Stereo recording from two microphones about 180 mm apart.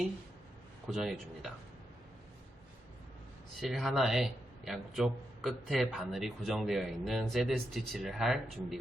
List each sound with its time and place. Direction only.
0.9 s a man's voice: centre (ahead or behind)
3.6 s a man's voice: centre (ahead or behind)